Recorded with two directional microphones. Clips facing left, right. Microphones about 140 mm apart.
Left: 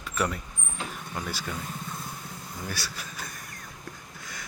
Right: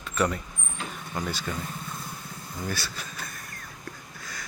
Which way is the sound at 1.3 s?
10° left (ahead or behind).